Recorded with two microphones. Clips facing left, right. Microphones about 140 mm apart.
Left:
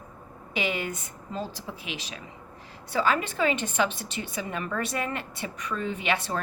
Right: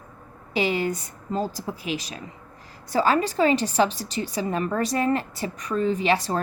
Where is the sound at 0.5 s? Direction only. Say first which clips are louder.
Right 6 dB; 35° right (ahead or behind).